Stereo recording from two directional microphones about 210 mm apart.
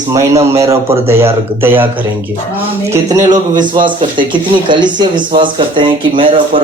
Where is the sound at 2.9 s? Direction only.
15° right (ahead or behind).